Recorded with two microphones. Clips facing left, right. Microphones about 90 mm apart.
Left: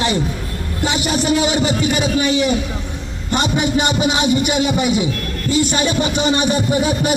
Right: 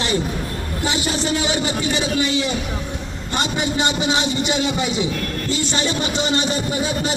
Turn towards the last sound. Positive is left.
turn(degrees=20)  # may be behind; listen again after turning